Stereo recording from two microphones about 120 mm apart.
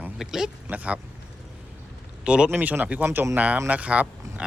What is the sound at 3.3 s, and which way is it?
Speech, 10° right (ahead or behind).